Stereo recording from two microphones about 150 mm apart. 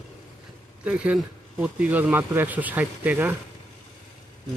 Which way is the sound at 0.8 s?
10° right (ahead or behind).